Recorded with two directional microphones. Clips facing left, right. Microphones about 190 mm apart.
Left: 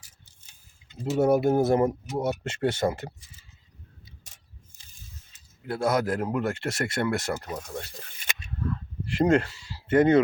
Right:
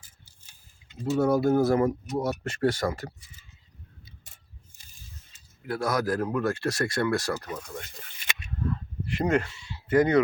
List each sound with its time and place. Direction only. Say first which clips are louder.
1.2 s speech: left 1 dB; 25° left (ahead or behind)
5.6 s speech: left 2 dB; 25° left (ahead or behind)
9.0 s speech: left 4 dB; 30° left (ahead or behind)